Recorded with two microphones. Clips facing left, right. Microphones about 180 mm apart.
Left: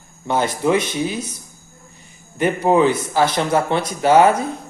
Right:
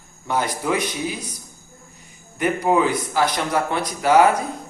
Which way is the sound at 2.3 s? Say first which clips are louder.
Left 3 dB; 30° left (ahead or behind).